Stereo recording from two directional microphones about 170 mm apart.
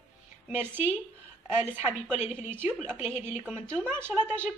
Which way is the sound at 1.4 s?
15° right (ahead or behind).